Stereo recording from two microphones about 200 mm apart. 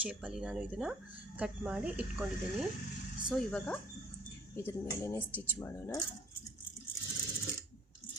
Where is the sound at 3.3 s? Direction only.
5° left (ahead or behind).